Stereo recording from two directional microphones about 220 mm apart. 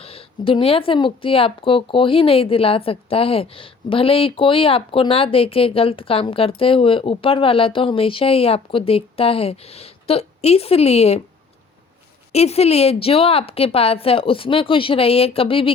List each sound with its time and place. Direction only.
0.0 s speech: 25° left (ahead or behind)
12.3 s speech: 30° left (ahead or behind)